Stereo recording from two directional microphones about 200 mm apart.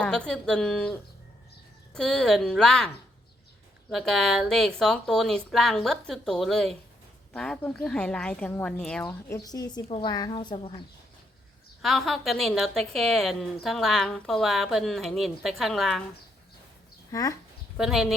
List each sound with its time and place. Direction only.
0.0 s a woman's voice: 5° left (ahead or behind)
3.9 s a woman's voice: centre (ahead or behind)
9.0 s speech: 15° left (ahead or behind)
11.8 s a woman's voice: centre (ahead or behind)
17.1 s speech: 15° left (ahead or behind)
17.7 s a woman's voice: centre (ahead or behind)